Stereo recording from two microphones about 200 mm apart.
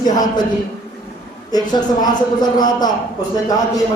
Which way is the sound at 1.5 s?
20° left (ahead or behind).